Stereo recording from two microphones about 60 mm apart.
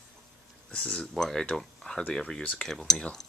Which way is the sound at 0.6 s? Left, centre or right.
Centre.